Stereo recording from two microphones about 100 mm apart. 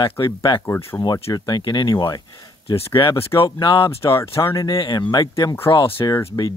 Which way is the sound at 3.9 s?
25° left (ahead or behind).